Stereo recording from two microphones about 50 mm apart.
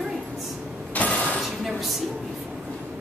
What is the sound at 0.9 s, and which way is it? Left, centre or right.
Mechanisms, left.